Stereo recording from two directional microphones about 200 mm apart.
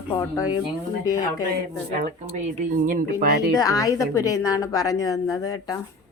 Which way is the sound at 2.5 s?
40° right (ahead or behind).